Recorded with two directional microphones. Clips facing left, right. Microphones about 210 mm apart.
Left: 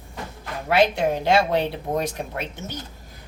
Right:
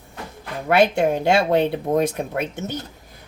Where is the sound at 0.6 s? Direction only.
50° right (ahead or behind).